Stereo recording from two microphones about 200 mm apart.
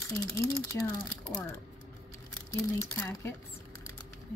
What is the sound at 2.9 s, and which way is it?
Speech, 10° left (ahead or behind).